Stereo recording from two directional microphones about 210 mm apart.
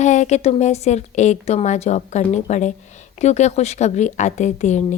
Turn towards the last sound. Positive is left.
turn(degrees=35)  # may be behind; listen again after turning